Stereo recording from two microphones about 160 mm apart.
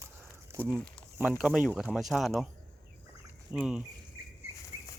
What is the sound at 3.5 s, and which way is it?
Speech, 5° right (ahead or behind).